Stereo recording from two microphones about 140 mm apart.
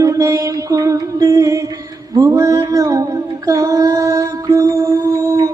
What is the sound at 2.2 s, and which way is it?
Female singing, 25° right (ahead or behind).